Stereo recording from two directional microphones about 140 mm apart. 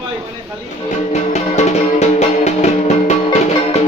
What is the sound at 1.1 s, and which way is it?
Music, 55° left (ahead or behind).